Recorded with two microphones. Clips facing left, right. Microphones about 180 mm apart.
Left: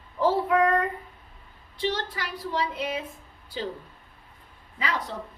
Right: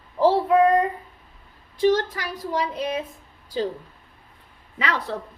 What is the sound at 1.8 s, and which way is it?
A woman's voice, 45° right (ahead or behind).